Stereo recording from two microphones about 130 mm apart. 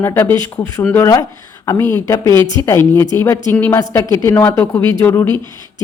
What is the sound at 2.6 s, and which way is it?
A woman's voice, 20° left (ahead or behind).